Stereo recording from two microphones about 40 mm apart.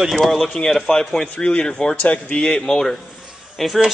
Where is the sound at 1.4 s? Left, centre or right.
Left.